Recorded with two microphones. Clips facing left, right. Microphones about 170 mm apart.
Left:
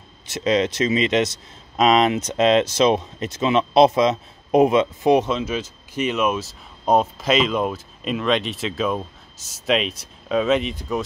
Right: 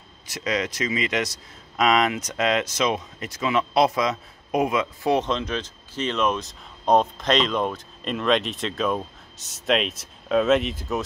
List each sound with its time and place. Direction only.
0.3 s speech: 25° left (ahead or behind)
5.2 s speech: 5° left (ahead or behind)